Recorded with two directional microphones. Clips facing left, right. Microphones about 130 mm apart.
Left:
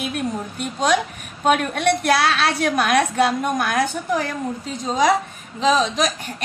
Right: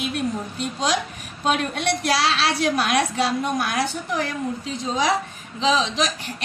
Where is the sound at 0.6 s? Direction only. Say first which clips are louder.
Left 5 dB; 50° left (ahead or behind).